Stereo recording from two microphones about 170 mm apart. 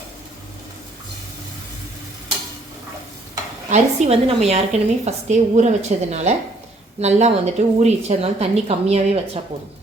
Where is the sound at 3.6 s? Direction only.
40° right (ahead or behind).